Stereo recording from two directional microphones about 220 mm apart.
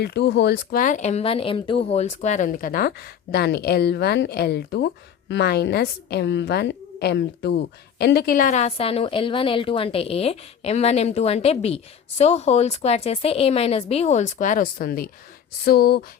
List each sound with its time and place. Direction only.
0.0 s a woman's voice: 50° left (ahead or behind)